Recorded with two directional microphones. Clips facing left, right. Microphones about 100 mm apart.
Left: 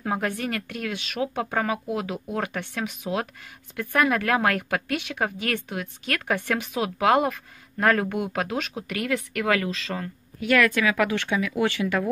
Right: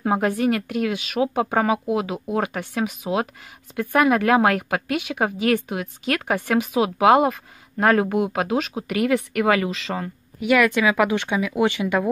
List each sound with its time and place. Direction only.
0.0 s speech: 25° right (ahead or behind)
3.1 s speech: 10° right (ahead or behind)
8.5 s speech: 10° right (ahead or behind)